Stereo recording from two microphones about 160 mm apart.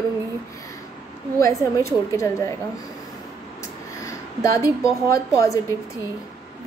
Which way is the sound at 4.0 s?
20° left (ahead or behind).